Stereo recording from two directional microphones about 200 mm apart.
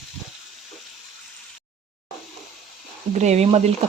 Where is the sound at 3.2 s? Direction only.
35° right (ahead or behind).